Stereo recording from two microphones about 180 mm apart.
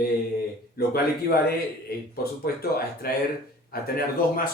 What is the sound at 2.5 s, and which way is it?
A man's voice, 60° left (ahead or behind).